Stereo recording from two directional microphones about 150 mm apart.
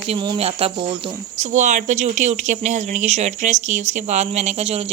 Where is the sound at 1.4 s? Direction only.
55° right (ahead or behind).